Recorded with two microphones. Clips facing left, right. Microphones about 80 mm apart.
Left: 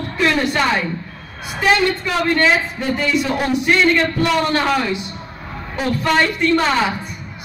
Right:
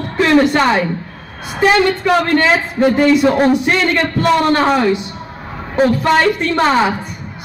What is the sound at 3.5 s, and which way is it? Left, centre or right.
Speech, right.